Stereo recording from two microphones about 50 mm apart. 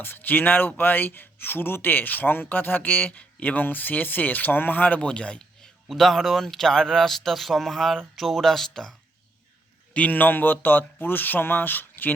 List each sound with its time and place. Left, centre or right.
0.0 s speech: left
4.9 s speech: left
5.9 s speech: centre
9.9 s speech: left